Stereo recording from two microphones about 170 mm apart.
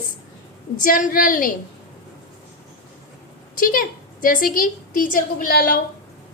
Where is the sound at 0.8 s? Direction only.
50° left (ahead or behind).